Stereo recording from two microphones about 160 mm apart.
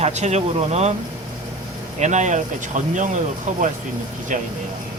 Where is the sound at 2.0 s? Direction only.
50° right (ahead or behind).